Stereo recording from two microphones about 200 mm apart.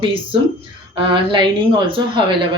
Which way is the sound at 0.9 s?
25° right (ahead or behind).